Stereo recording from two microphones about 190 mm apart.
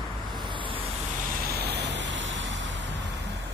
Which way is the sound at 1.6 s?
60° right (ahead or behind).